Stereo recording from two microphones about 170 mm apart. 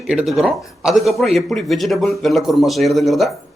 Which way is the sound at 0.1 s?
5° right (ahead or behind).